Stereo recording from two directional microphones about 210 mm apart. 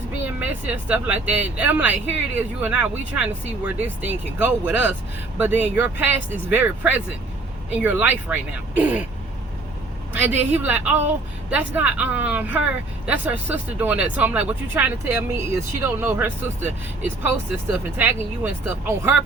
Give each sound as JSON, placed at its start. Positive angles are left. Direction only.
{"t": 0.3, "sound": "speech", "side_deg": -5}
{"t": 10.1, "sound": "speech", "side_deg": -10}